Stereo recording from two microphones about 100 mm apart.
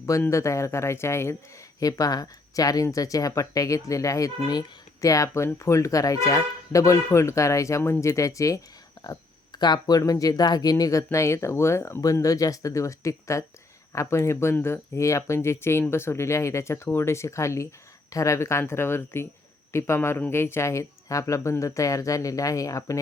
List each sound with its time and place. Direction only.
0.3 s speech: 30° left (ahead or behind)
1.8 s speech: 40° left (ahead or behind)
9.0 s a sound: 45° left (ahead or behind)
9.6 s speech: 45° left (ahead or behind)